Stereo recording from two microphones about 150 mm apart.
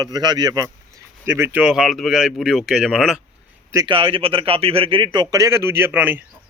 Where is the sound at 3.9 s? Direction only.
35° right (ahead or behind); by 6.2 s 10° right (ahead or behind).